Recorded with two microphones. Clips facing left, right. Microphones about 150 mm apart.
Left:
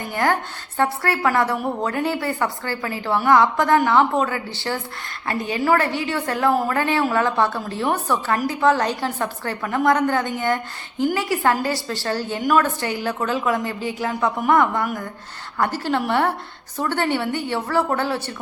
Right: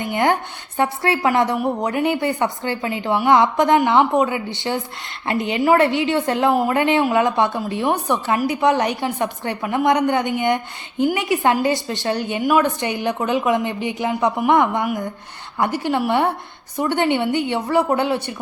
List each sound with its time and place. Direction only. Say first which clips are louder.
0.0 s a woman's voice: right 3 dB; 20° right (ahead or behind)